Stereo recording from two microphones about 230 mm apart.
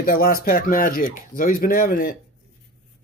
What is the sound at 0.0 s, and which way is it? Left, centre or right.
Speech, left.